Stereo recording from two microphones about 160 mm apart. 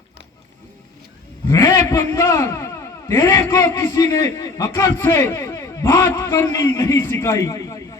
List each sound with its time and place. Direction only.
1.5 s a man's voice: 20° left (ahead or behind)